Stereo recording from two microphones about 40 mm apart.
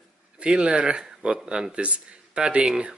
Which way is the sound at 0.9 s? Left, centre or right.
Centre.